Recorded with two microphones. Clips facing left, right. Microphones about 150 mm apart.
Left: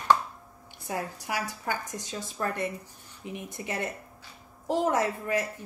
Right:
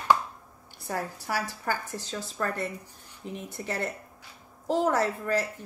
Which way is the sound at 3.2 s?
10° left (ahead or behind).